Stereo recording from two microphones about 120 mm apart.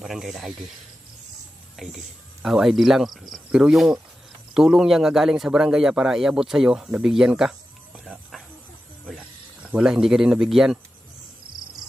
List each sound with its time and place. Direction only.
0.0 s speech: centre (ahead or behind)
1.8 s a man's voice: centre (ahead or behind)